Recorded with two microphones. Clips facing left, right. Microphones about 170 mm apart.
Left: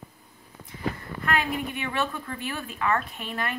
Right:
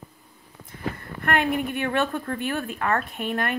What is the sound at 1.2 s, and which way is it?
Speech, 55° right (ahead or behind).